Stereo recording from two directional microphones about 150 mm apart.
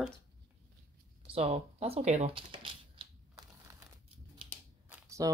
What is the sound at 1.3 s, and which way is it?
Speech, 40° right (ahead or behind).